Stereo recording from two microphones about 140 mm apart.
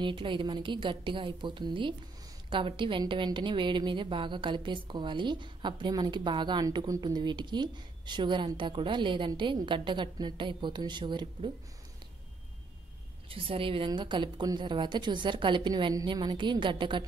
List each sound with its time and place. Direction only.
0.0 s a woman's voice: 35° right (ahead or behind)
13.3 s a woman's voice: 40° right (ahead or behind)